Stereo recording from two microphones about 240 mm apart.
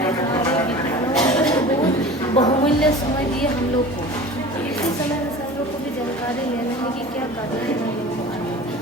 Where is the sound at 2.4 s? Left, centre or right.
Left.